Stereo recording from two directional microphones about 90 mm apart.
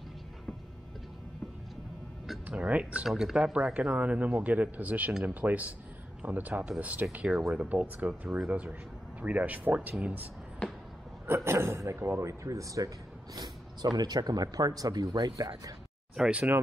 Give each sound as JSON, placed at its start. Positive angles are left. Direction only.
{"t": 2.4, "sound": "speech", "side_deg": -15}
{"t": 3.1, "sound": "a man's voice", "side_deg": -5}
{"t": 11.2, "sound": "speech", "side_deg": -30}
{"t": 16.2, "sound": "speech", "side_deg": -10}